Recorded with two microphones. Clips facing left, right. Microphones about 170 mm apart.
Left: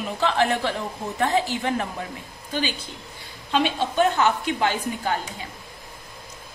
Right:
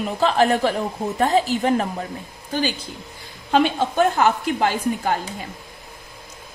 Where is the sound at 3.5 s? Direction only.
50° right (ahead or behind).